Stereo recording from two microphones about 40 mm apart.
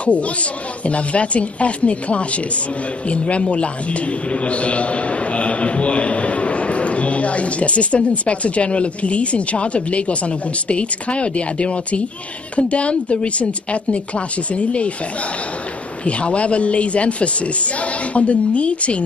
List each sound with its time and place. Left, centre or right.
0.0 s a man's voice: left
16.1 s a man's voice: left